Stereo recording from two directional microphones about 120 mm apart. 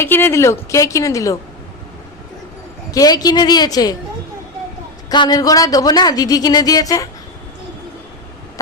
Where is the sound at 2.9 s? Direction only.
30° left (ahead or behind).